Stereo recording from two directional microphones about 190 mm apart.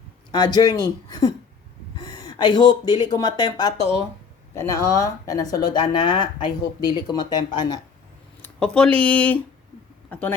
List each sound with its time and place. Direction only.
0.3 s speech: 20° left (ahead or behind)
8.4 s speech: 5° left (ahead or behind)